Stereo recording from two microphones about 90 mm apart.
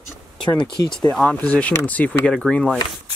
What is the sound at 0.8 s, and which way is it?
Speech, 5° left (ahead or behind).